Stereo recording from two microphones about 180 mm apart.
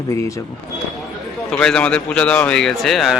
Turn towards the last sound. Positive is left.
turn(degrees=0)  # may be behind; listen again after turning